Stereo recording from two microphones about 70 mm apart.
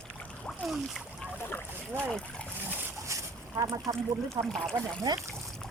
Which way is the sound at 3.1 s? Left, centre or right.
Right.